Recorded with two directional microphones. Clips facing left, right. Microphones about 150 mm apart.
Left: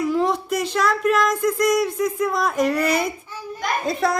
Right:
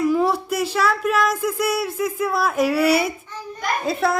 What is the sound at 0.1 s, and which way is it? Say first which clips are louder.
A child's voice: right 1 dB; 5° right (ahead or behind).